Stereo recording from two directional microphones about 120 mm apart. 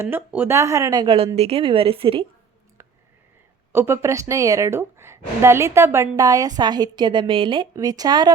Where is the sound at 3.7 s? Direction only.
20° right (ahead or behind).